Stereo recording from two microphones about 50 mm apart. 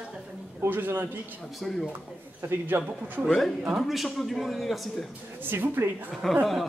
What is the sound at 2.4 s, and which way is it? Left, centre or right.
Speech, right.